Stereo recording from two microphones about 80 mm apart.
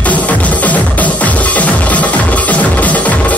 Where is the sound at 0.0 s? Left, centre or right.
Centre.